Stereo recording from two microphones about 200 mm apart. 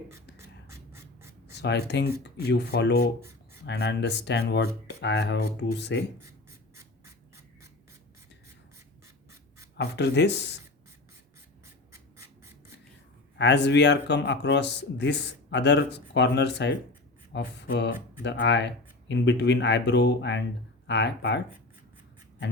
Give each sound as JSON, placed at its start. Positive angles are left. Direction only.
{"t": 0.7, "sound": "a sound", "side_deg": -15}
{"t": 1.5, "sound": "speech", "side_deg": 60}
{"t": 9.7, "sound": "speech", "side_deg": 60}
{"t": 13.3, "sound": "speech", "side_deg": 60}